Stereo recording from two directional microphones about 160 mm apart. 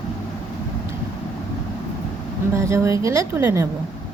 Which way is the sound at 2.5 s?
20° right (ahead or behind).